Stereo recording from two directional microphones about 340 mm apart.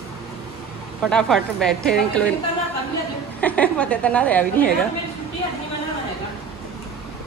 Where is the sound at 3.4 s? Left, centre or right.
Centre.